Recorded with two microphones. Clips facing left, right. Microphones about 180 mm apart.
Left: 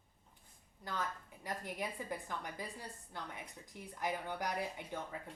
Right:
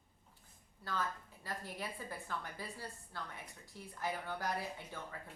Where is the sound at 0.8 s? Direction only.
15° left (ahead or behind).